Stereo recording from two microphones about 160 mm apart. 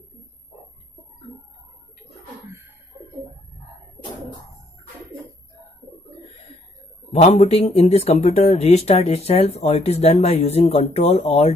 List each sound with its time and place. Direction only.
7.1 s speech: 40° left (ahead or behind)